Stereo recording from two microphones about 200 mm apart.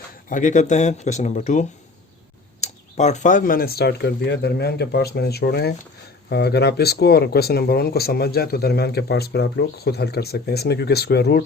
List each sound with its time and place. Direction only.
0.3 s speech: 40° left (ahead or behind)